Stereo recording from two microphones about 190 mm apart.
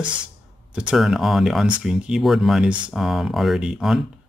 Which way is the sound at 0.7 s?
5° right (ahead or behind).